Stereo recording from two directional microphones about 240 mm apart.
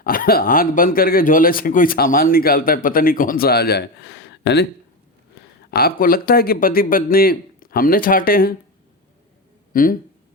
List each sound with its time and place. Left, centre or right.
0.0 s speech: left
5.7 s speech: left
9.7 s speech: left